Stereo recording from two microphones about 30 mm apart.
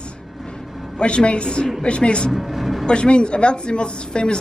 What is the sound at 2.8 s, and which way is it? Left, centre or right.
A woman's voice, left.